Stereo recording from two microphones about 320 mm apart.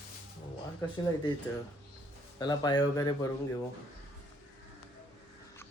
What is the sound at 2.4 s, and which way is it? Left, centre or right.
Speech, centre.